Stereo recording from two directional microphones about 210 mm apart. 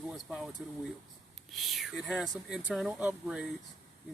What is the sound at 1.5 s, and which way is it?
Speech, centre (ahead or behind).